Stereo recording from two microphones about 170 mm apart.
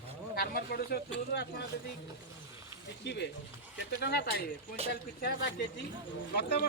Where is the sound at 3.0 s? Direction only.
85° left; by 5.3 s 65° left (ahead or behind).